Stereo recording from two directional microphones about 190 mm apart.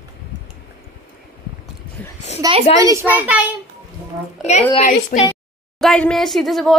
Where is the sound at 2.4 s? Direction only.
20° right (ahead or behind).